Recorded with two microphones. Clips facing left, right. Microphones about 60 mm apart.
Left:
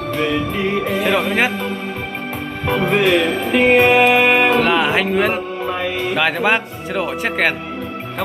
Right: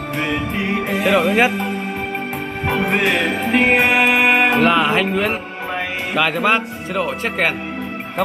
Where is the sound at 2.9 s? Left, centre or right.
Right.